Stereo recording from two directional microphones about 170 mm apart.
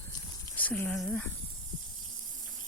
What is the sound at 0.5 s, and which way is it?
Speech, 10° left (ahead or behind).